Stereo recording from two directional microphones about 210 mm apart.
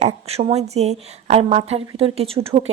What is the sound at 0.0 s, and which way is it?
A woman's voice, 30° right (ahead or behind).